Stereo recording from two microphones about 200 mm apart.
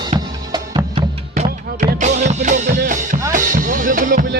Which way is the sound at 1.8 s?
40° right (ahead or behind).